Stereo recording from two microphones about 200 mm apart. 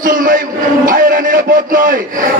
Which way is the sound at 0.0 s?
40° right (ahead or behind).